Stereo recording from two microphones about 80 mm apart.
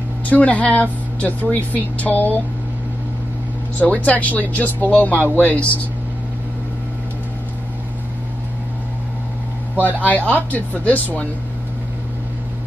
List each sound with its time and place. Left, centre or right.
0.3 s speech: centre
3.8 s speech: centre
10.0 s speech: centre